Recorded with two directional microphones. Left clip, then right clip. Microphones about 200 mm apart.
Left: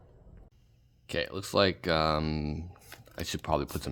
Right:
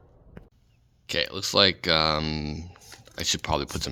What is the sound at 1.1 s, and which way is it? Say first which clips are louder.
Speech: right 6 dB; centre (ahead or behind).